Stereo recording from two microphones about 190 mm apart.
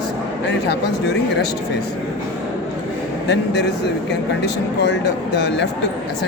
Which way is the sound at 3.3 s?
65° left (ahead or behind).